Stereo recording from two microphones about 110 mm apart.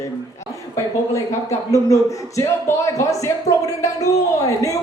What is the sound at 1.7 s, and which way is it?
Speech, 30° left (ahead or behind).